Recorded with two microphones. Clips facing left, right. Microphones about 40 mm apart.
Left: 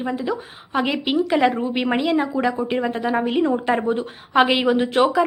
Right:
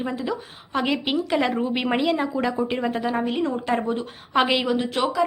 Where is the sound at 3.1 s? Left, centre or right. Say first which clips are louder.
Left 4 dB; centre.